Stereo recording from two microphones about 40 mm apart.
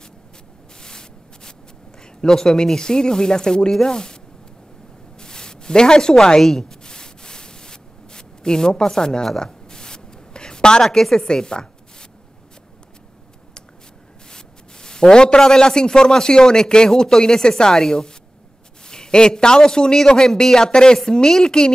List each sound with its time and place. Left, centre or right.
0.7 s spray: centre
2.2 s a man's voice: centre
5.2 s a sound: centre
10.8 s a woman's voice: centre
14.3 s a man's voice: centre